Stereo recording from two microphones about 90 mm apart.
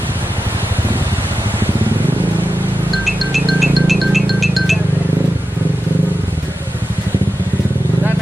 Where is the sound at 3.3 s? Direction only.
Centre (ahead or behind).